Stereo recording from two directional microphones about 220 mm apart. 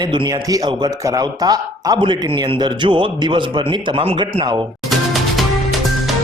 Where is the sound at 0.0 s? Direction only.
20° right (ahead or behind).